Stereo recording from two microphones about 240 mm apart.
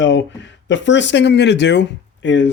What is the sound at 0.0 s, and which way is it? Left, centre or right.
Speech, left.